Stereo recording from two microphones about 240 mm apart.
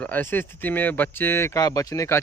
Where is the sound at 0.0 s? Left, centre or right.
Centre.